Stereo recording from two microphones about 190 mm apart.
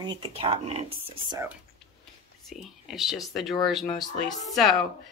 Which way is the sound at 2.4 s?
Centre (ahead or behind).